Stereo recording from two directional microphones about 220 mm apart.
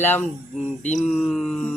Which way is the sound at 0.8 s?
30° left (ahead or behind).